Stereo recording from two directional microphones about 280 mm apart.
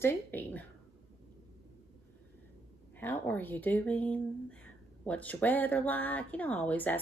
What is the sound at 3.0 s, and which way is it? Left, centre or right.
Speech, centre.